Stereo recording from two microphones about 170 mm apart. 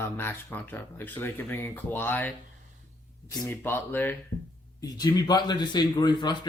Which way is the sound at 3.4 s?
15° left (ahead or behind).